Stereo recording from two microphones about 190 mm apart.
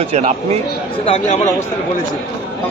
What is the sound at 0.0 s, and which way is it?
Speech, 30° right (ahead or behind).